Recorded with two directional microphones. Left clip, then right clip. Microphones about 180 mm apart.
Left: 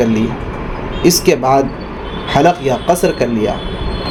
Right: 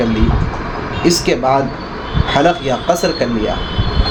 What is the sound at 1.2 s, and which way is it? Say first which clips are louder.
Speech: left 4 dB; 50° left (ahead or behind).